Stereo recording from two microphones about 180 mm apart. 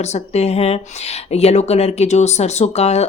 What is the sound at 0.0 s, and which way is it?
Speech, 35° left (ahead or behind).